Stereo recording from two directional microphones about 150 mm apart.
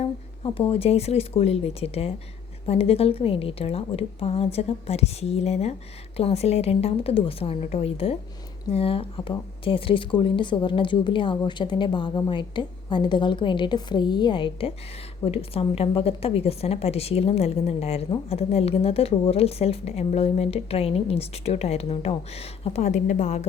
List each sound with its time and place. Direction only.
0.0 s a woman's voice: 40° left (ahead or behind)